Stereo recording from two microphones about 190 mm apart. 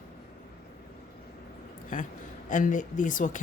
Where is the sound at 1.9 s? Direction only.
45° left (ahead or behind).